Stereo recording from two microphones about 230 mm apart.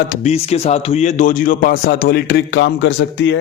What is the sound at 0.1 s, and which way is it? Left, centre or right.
Speech, left.